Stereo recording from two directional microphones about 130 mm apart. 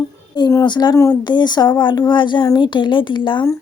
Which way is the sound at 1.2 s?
35° left (ahead or behind).